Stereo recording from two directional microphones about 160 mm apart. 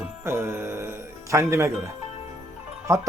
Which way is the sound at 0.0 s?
15° right (ahead or behind).